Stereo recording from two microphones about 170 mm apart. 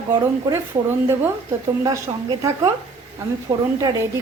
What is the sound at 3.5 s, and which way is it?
Speech, 20° right (ahead or behind).